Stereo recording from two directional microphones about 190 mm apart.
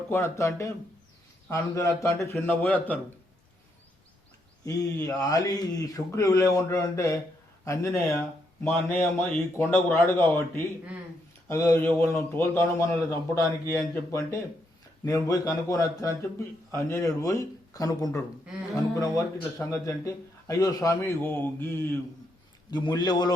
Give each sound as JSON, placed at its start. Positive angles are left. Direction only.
{"t": 0.1, "sound": "a man's voice", "side_deg": 15}
{"t": 4.9, "sound": "a man's voice", "side_deg": 15}
{"t": 22.7, "sound": "a man's voice", "side_deg": 20}